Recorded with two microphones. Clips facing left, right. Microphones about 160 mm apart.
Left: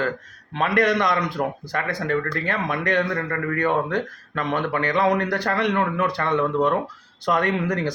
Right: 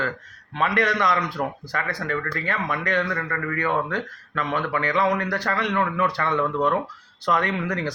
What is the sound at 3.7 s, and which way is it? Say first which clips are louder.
Speech: left 2 dB; 20° left (ahead or behind).